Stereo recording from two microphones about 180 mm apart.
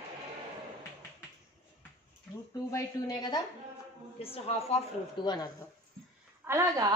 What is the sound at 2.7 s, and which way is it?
Speech, 20° left (ahead or behind).